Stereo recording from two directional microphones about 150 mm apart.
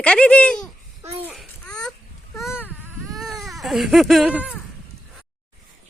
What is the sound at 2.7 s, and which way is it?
Baby cry, 15° right (ahead or behind).